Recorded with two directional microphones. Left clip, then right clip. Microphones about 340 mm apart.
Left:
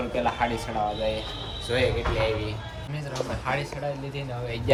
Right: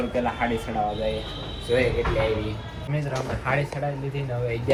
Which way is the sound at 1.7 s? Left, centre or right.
Centre.